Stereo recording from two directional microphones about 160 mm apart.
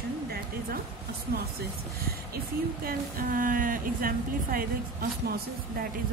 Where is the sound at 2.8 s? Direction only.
60° right (ahead or behind).